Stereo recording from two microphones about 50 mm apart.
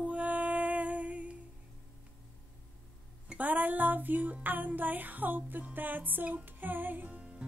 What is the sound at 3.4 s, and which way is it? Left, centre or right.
Music, right.